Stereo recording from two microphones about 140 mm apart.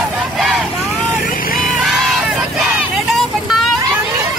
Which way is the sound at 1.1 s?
80° left.